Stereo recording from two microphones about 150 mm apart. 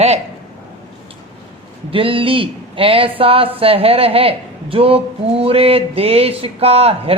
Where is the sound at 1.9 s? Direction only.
35° right (ahead or behind).